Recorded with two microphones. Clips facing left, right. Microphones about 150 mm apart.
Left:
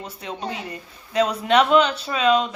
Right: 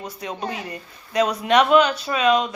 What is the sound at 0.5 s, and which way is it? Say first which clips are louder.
Speech: right 1 dB; 25° left (ahead or behind).